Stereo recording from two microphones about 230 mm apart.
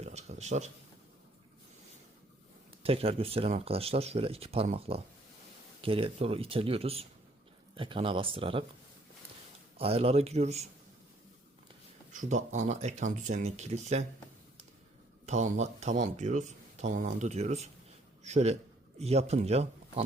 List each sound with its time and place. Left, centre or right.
0.0 s a sound: right
2.8 s speech: right
9.7 s speech: right
12.1 s speech: right
15.3 s a man's voice: right